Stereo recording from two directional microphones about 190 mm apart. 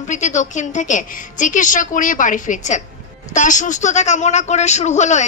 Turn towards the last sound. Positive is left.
turn(degrees=35)  # may be behind; listen again after turning